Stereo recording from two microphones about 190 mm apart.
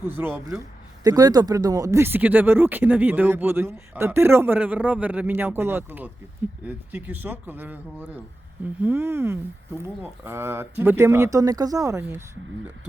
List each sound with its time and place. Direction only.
0.0 s speech: 10° right (ahead or behind)